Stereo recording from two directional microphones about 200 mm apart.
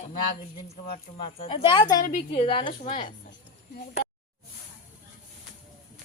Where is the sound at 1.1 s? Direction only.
30° left (ahead or behind).